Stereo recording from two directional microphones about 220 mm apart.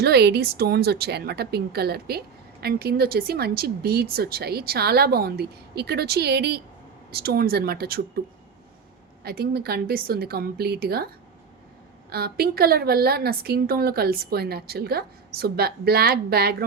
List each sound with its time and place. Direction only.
0.0 s a woman's voice: 50° right (ahead or behind)
9.2 s a woman's voice: 45° right (ahead or behind)
12.1 s a woman's voice: 45° right (ahead or behind)